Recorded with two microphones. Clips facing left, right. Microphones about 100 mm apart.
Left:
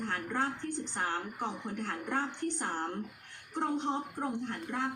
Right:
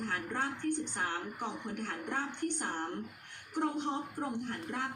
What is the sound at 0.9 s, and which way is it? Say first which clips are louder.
Speech: left 2 dB; 30° left (ahead or behind).